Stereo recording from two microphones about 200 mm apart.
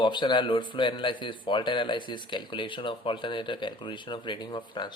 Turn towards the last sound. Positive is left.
turn(degrees=25)  # may be behind; listen again after turning